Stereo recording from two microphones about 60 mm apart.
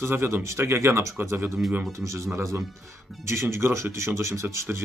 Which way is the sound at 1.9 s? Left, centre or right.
Right.